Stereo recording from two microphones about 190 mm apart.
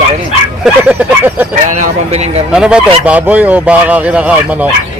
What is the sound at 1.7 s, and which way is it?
Speech, 35° right (ahead or behind).